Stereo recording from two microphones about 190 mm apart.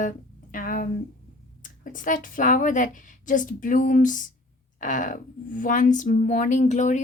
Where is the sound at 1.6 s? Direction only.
45° left (ahead or behind).